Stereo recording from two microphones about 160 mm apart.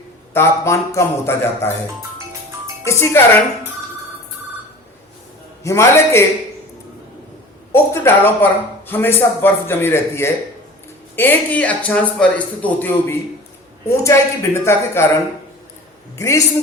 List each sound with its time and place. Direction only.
0.3 s speech: 15° left (ahead or behind)
2.8 s speech: 15° left (ahead or behind)
5.6 s speech: 15° left (ahead or behind)
7.7 s speech: 15° left (ahead or behind)
16.1 s a man's voice: 20° left (ahead or behind)